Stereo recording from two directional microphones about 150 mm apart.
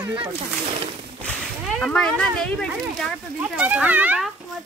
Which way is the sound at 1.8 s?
5° left (ahead or behind).